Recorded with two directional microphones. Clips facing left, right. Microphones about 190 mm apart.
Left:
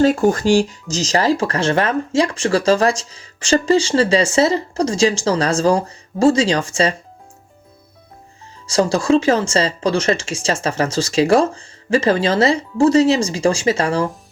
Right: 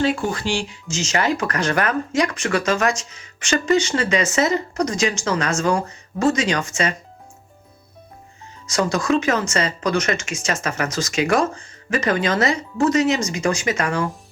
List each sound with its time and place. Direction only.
0.0 s speech: 45° left (ahead or behind)
8.6 s speech: 30° left (ahead or behind)